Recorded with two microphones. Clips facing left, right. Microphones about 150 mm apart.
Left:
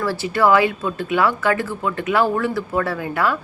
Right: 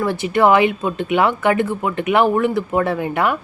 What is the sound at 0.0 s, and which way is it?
A woman's voice, 20° right (ahead or behind).